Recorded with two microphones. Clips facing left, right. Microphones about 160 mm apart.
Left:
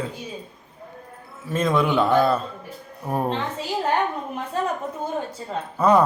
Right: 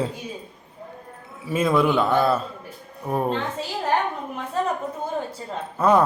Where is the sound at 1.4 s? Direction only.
10° right (ahead or behind).